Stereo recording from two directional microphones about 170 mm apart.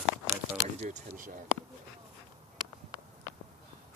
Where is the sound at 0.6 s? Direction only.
45° right (ahead or behind).